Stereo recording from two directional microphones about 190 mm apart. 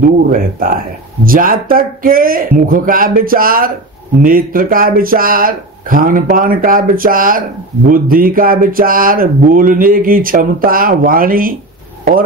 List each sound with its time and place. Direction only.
0.0 s speech: 45° right (ahead or behind)